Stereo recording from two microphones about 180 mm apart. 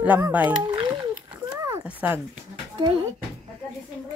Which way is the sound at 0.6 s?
25° right (ahead or behind).